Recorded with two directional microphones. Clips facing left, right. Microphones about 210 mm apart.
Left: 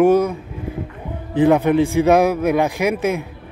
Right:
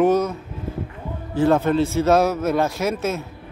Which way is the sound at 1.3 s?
15° left (ahead or behind).